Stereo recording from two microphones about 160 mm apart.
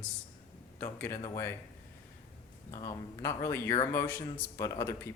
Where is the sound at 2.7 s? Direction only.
20° left (ahead or behind).